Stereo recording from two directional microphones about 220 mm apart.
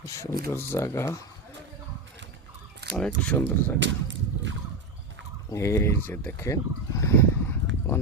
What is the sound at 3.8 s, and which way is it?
Whip, 55° right (ahead or behind).